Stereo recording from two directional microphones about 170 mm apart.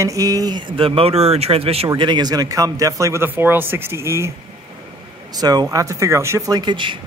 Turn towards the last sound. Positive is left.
turn(degrees=-25)  # may be behind; listen again after turning